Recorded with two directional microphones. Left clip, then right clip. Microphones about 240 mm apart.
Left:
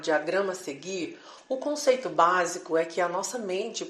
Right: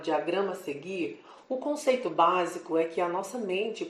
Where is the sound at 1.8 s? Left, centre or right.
Left.